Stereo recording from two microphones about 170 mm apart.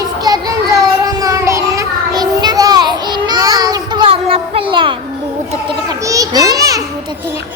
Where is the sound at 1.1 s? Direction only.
20° right (ahead or behind).